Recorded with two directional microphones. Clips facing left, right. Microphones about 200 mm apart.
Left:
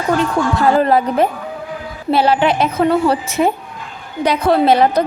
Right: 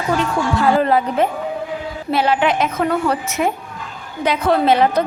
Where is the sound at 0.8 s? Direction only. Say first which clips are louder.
Left 2 dB; 40° left (ahead or behind).